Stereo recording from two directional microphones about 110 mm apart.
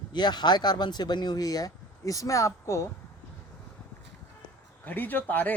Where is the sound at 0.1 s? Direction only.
40° left (ahead or behind); by 2.9 s 25° left (ahead or behind).